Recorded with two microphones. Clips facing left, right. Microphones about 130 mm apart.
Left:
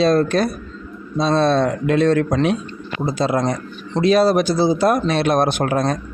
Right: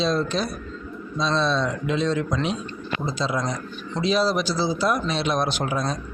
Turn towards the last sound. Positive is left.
turn(degrees=55)  # may be behind; listen again after turning